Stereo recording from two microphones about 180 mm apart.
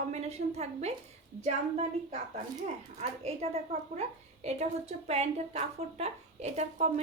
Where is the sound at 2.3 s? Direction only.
40° right (ahead or behind).